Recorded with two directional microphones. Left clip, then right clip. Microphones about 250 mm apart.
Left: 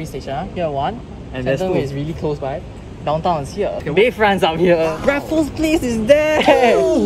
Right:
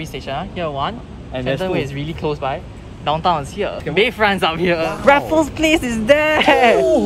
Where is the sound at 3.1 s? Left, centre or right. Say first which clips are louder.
Even; centre.